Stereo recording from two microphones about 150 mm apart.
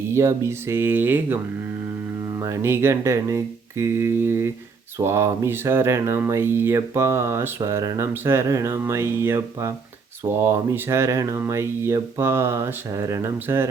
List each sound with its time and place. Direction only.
0.1 s speech: 20° right (ahead or behind)